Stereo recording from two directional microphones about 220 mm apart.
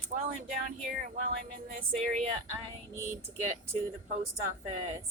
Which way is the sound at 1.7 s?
35° right (ahead or behind).